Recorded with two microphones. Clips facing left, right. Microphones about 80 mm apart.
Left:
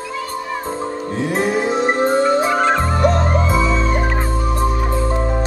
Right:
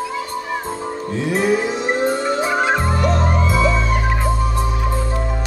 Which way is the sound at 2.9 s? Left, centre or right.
Left.